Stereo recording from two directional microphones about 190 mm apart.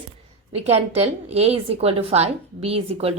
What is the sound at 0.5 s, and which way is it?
A woman's voice, 35° right (ahead or behind).